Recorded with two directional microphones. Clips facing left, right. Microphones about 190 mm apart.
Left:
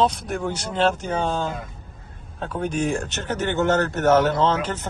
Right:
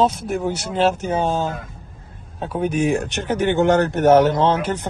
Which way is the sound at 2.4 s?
10° right (ahead or behind).